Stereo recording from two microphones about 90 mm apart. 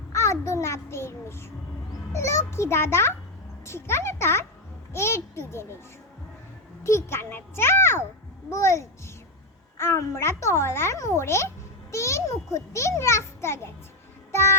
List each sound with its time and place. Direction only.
0.1 s a sound: 35° left (ahead or behind)
2.1 s a child's voice: 30° left (ahead or behind)
6.8 s a child's voice: 30° left (ahead or behind)